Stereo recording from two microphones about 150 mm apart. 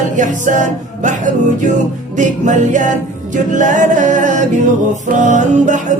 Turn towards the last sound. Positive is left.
turn(degrees=-55)  # may be behind; listen again after turning